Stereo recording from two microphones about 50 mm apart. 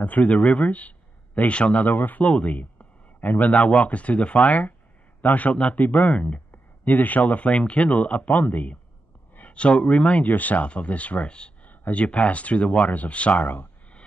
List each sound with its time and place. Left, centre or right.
0.0 s a man's voice: left
6.1 s speech: left
6.5 s speech: left